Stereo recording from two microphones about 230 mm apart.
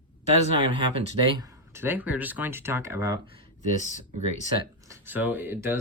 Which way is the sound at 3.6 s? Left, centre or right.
Left.